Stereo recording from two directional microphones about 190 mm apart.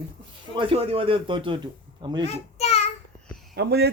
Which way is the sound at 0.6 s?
30° right (ahead or behind).